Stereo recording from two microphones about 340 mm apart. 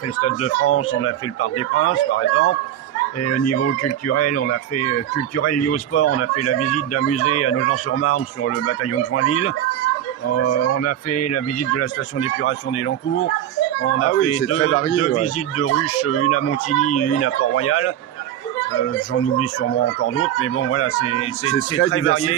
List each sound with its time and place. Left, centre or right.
0.2 s speech: left
3.2 s speech: left
19.1 s speech: left